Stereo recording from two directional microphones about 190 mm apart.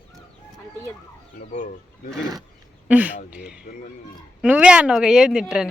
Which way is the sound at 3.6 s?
45° left (ahead or behind).